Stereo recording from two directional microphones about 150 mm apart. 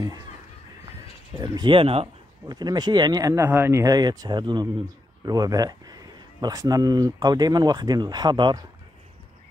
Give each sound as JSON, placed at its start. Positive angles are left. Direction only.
{"t": 1.4, "sound": "speech", "side_deg": -30}
{"t": 2.4, "sound": "speech", "side_deg": -30}